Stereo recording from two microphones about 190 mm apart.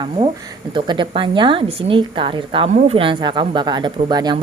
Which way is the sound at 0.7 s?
25° right (ahead or behind).